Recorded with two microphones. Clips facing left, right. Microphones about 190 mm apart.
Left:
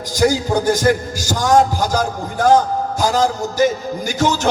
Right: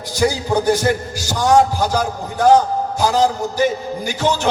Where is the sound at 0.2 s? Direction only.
45° left (ahead or behind).